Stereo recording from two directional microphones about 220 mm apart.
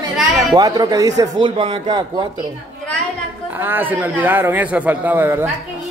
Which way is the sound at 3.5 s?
10° right (ahead or behind).